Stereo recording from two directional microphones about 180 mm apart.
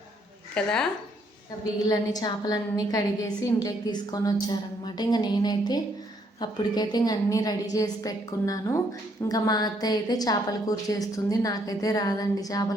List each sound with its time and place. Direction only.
0.5 s speech: 5° left (ahead or behind)
1.8 s a woman's voice: 20° left (ahead or behind)